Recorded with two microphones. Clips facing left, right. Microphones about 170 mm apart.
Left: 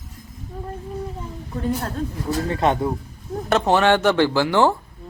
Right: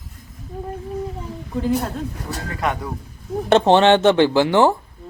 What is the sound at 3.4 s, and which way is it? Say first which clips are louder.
Speech: right 4 dB; 25° right (ahead or behind).